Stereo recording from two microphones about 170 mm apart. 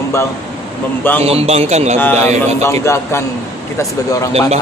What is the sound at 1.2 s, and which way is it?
Speech, 35° right (ahead or behind).